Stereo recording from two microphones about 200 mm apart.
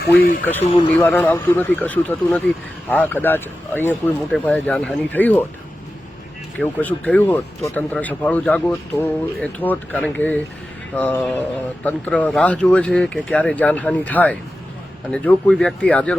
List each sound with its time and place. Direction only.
0.2 s speech: 45° left (ahead or behind)
0.9 s speech: 10° left (ahead or behind)
6.6 s speech: 5° left (ahead or behind)